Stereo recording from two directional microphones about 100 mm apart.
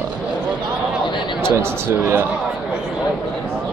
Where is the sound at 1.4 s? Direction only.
25° right (ahead or behind).